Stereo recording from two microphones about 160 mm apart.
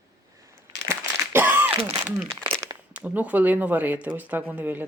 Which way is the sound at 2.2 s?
35° right (ahead or behind).